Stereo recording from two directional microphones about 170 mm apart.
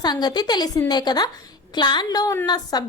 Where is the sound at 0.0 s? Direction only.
25° left (ahead or behind).